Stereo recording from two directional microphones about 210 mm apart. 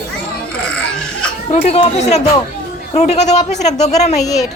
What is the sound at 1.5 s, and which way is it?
Speech, 30° left (ahead or behind).